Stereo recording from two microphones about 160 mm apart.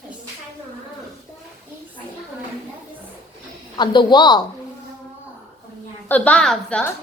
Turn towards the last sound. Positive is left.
turn(degrees=5)  # may be behind; listen again after turning